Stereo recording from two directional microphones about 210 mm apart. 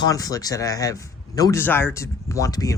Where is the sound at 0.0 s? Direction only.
15° left (ahead or behind).